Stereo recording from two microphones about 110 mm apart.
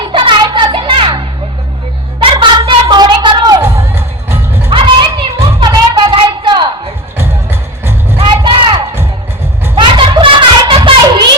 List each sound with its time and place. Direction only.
0.0 s music: 50° right (ahead or behind)
2.3 s a sound: 45° right (ahead or behind)
3.6 s music: 25° right (ahead or behind)
4.7 s music: 45° right (ahead or behind)
5.7 s child singing: 35° right (ahead or behind)
6.1 s a sound: 45° right (ahead or behind)
8.2 s music: 50° right (ahead or behind)
9.7 s a sound: 50° right (ahead or behind)
10.8 s child singing: 40° right (ahead or behind)